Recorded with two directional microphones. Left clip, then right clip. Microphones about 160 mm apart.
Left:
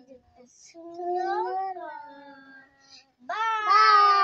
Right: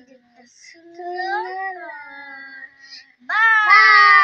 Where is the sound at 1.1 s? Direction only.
10° left (ahead or behind).